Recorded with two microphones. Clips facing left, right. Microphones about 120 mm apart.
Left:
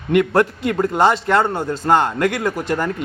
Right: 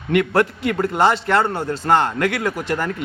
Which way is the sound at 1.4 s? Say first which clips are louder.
Left 1 dB; 15° left (ahead or behind).